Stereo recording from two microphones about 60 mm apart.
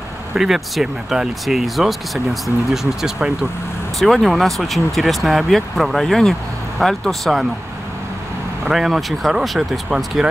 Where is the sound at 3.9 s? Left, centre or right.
Centre.